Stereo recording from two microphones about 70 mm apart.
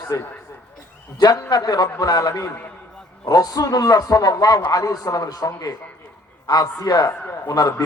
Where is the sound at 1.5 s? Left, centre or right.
Left.